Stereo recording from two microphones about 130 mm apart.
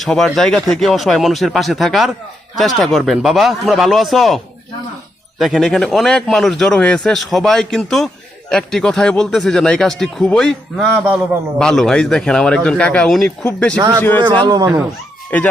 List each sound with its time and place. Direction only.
0.0 s a man's voice: centre (ahead or behind)
5.4 s a man's voice: centre (ahead or behind)
13.7 s speech: 30° right (ahead or behind)
14.0 s a man's voice: 15° left (ahead or behind)
14.4 s speech: 30° right (ahead or behind)